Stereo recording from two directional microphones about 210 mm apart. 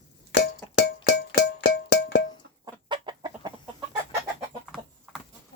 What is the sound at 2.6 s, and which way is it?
Chicken, 20° right (ahead or behind).